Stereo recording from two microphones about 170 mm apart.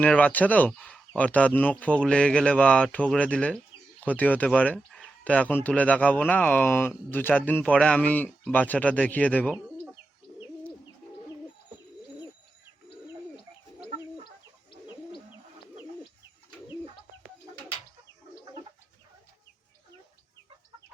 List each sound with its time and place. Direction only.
0.0 s speech: 10° left (ahead or behind)
14.7 s bird: 30° left (ahead or behind)